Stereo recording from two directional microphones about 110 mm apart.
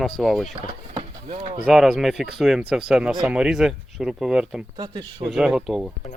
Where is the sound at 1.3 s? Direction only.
75° right (ahead or behind).